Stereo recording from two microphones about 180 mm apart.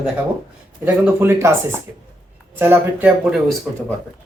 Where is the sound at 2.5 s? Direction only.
10° right (ahead or behind).